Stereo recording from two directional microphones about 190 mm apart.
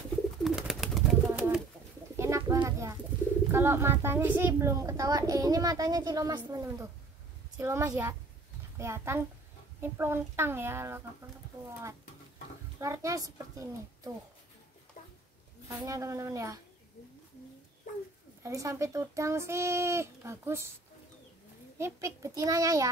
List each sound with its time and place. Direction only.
0.4 s bird: centre (ahead or behind)
2.1 s bird: 15° right (ahead or behind)
3.5 s a woman's voice: 15° right (ahead or behind)
12.8 s a woman's voice: 15° right (ahead or behind)
15.0 s a sound: 40° left (ahead or behind)
15.8 s a woman's voice: 15° right (ahead or behind)
18.4 s a woman's voice: 15° right (ahead or behind)
21.7 s a woman's voice: 15° right (ahead or behind)